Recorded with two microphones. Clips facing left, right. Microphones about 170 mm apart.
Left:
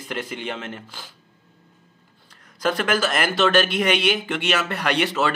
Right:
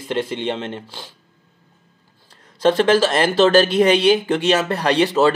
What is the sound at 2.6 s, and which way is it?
Speech, 30° right (ahead or behind).